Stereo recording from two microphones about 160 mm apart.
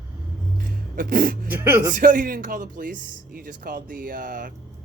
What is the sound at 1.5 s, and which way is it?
Speech, 15° right (ahead or behind).